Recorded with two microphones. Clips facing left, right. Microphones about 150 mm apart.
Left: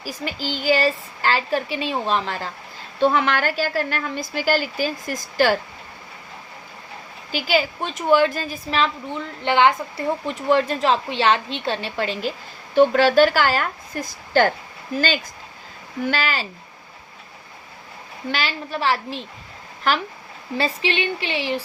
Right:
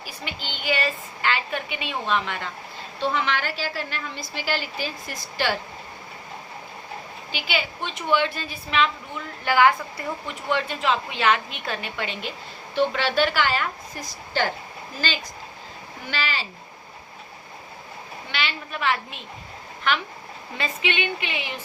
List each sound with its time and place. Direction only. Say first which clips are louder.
0.0 s a woman's voice: left 7 dB; 35° left (ahead or behind)
3.0 s a woman's voice: left 6 dB; 50° left (ahead or behind)
7.3 s a woman's voice: left 8 dB; 40° left (ahead or behind); by 9.8 s 25° left (ahead or behind)
10.2 s a woman's voice: left 7 dB; 40° left (ahead or behind)
16.0 s a woman's voice: left 6 dB; 45° left (ahead or behind)
18.3 s a woman's voice: left 5 dB; 40° left (ahead or behind)